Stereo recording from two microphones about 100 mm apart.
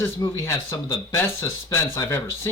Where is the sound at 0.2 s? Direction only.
40° left (ahead or behind).